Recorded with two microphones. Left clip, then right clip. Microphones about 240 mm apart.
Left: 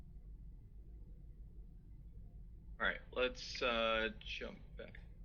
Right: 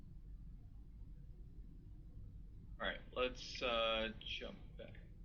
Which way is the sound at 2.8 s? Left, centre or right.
Left.